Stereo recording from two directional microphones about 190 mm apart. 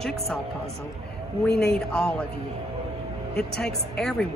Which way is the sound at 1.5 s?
5° left (ahead or behind).